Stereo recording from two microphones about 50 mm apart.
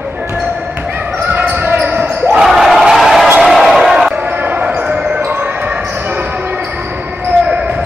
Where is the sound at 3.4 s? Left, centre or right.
Centre.